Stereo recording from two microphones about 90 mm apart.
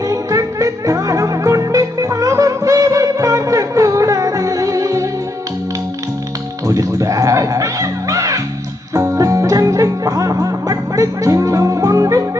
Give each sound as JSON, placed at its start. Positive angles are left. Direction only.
{"t": 0.1, "sound": "music", "side_deg": -40}
{"t": 6.7, "sound": "music", "side_deg": -40}